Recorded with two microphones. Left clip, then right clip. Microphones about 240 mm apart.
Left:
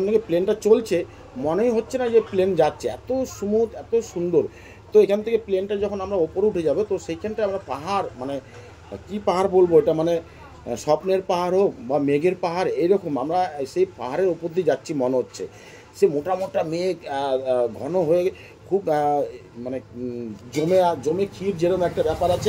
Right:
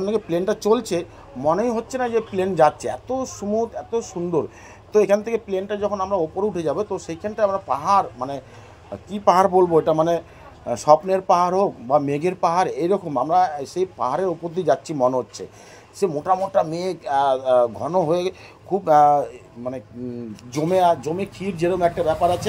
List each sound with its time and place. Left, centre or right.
0.0 s speech: right
9.6 s speech: right
20.5 s speech: right